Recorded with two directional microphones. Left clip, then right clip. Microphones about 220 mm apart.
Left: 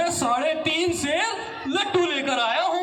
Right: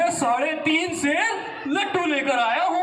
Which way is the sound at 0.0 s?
50° left (ahead or behind).